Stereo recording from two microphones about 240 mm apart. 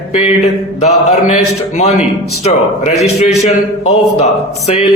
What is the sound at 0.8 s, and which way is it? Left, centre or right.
A man's voice, left.